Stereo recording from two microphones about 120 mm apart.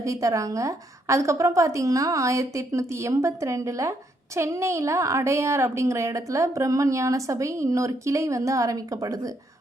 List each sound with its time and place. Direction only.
0.0 s a woman's voice: 25° right (ahead or behind)